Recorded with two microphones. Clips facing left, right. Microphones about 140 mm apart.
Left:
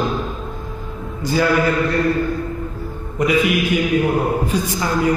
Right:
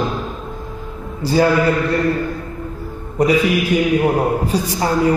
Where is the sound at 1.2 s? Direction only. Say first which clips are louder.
Right 4 dB; 35° right (ahead or behind).